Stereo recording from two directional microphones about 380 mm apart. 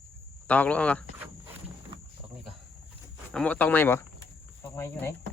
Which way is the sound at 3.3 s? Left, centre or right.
Centre.